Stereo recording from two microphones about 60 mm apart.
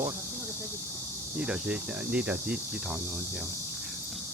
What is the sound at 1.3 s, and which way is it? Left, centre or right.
Cricket, centre.